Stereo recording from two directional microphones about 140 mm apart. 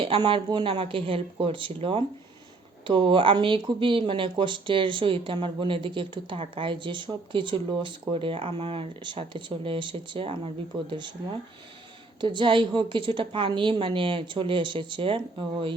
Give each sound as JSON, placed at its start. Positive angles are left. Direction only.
{"t": 0.0, "sound": "speech", "side_deg": -40}
{"t": 12.2, "sound": "speech", "side_deg": -35}